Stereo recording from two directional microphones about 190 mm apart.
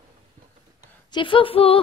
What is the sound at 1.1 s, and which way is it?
Speech, 25° left (ahead or behind).